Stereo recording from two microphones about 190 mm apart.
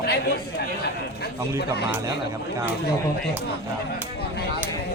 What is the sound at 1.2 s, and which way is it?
Speech, 60° left (ahead or behind).